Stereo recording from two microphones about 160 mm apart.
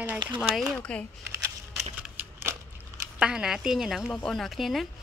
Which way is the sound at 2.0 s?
10° right (ahead or behind).